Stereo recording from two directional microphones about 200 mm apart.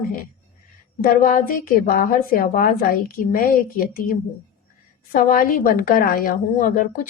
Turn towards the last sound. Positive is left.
turn(degrees=40)  # may be behind; listen again after turning